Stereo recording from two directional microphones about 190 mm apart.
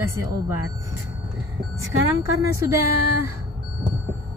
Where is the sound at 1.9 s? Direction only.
90° right.